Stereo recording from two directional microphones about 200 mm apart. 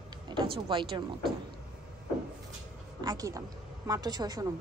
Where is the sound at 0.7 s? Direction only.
25° right (ahead or behind).